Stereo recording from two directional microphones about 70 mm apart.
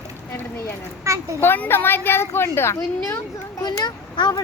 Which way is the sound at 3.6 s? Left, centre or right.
Left.